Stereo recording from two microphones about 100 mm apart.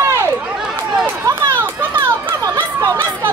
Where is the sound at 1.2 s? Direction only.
30° right (ahead or behind).